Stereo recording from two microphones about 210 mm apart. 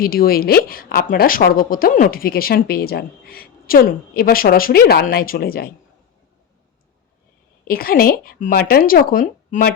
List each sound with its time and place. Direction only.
0.0 s speech: 45° left (ahead or behind)
7.7 s speech: 45° left (ahead or behind)